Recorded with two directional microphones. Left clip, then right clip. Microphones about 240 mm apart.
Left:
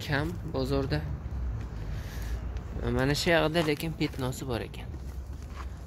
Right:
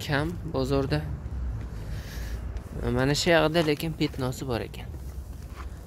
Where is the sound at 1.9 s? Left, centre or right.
Right.